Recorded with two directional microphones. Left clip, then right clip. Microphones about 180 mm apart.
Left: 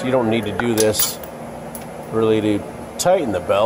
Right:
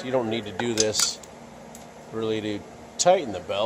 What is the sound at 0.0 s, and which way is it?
Speech, centre (ahead or behind).